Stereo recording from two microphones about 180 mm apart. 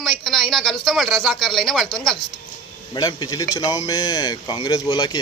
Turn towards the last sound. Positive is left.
turn(degrees=25)  # may be behind; listen again after turning